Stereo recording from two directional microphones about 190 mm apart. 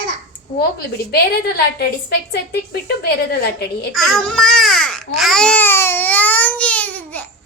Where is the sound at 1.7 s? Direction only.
55° left (ahead or behind).